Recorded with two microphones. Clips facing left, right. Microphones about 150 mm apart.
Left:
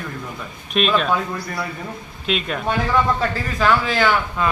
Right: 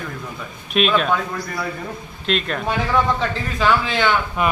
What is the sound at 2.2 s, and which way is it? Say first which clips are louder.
A man's voice: right 1 dB; 5° left (ahead or behind).